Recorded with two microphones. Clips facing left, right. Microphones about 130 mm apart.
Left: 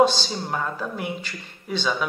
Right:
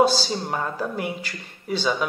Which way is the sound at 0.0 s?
5° right (ahead or behind).